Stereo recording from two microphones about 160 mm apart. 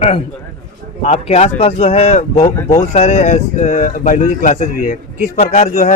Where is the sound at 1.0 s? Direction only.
40° left (ahead or behind).